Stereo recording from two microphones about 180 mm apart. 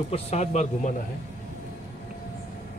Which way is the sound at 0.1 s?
40° left (ahead or behind).